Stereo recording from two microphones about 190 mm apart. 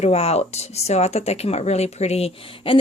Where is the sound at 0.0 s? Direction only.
35° left (ahead or behind).